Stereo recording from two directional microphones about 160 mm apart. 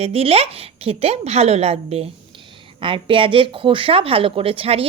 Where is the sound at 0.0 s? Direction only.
40° right (ahead or behind).